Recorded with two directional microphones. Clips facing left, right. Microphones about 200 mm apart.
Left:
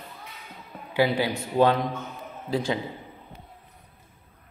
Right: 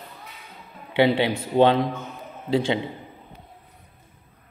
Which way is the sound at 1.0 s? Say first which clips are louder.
Right 4 dB; 25° right (ahead or behind).